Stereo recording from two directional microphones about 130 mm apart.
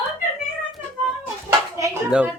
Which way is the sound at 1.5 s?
20° right (ahead or behind).